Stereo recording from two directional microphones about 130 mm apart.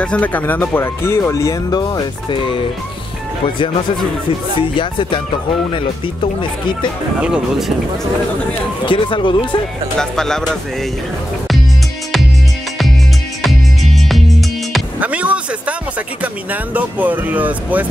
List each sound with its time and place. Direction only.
0.0 s speech: 10° left (ahead or behind); by 2.5 s 35° left (ahead or behind)
6.2 s speech: 35° left (ahead or behind)
7.2 s speech: 10° right (ahead or behind)
8.8 s speech: 40° left (ahead or behind)
9.9 s music: 5° left (ahead or behind)
13.4 s music: centre (ahead or behind)
15.0 s music: 10° right (ahead or behind)
16.7 s speech: 15° right (ahead or behind)